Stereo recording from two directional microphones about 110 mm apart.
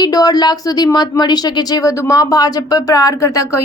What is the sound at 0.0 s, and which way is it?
A woman's voice, 35° left (ahead or behind).